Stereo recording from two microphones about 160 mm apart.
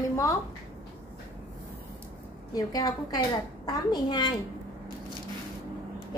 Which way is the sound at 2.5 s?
25° left (ahead or behind).